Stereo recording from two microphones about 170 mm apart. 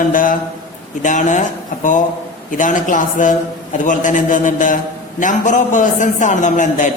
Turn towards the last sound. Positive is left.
turn(degrees=45)  # may be behind; listen again after turning